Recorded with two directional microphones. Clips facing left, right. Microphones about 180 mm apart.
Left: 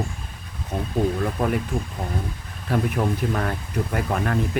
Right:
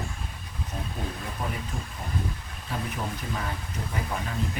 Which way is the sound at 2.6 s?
65° left (ahead or behind).